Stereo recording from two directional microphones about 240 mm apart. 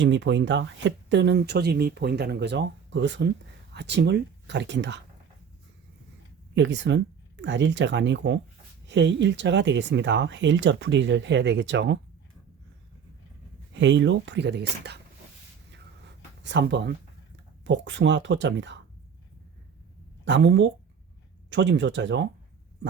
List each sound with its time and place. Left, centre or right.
0.0 s speech: right
6.5 s speech: right
13.7 s speech: right
16.4 s speech: right
20.2 s speech: right